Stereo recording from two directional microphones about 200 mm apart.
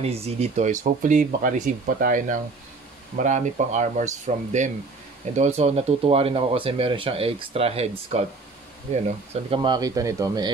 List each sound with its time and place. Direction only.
0.0 s speech: 30° right (ahead or behind)